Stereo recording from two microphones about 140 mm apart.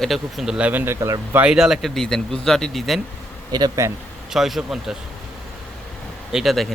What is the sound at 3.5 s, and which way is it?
Speech, 30° right (ahead or behind).